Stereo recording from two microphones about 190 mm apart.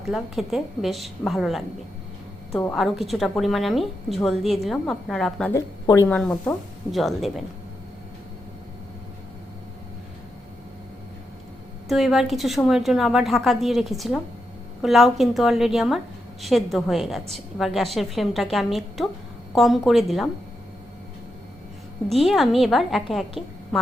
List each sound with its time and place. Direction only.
0.0 s a woman's voice: centre (ahead or behind)
5.5 s speech: 15° left (ahead or behind)
6.1 s a woman's voice: 5° left (ahead or behind)
11.9 s a woman's voice: centre (ahead or behind)
22.1 s a woman's voice: centre (ahead or behind)